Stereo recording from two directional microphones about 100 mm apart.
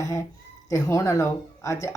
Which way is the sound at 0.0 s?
30° left (ahead or behind).